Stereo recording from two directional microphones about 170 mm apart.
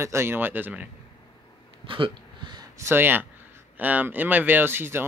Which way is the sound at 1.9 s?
30° right (ahead or behind).